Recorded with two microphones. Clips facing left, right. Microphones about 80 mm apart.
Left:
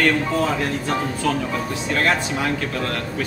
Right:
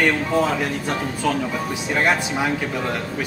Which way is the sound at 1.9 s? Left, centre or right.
Centre.